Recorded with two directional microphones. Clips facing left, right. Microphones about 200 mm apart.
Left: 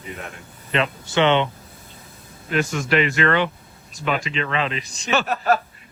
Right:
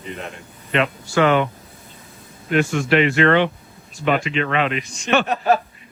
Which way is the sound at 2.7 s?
40° left (ahead or behind).